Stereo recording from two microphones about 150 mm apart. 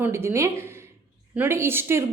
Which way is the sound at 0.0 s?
15° right (ahead or behind).